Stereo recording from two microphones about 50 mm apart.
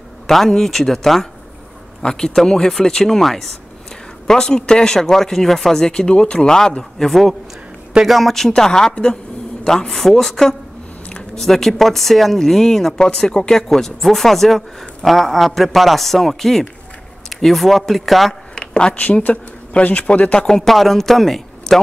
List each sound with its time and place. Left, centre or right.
0.3 s speech: centre
4.3 s speech: centre
11.1 s a sound: centre
11.4 s speech: centre
18.5 s a sound: centre
18.9 s speech: left
20.3 s speech: centre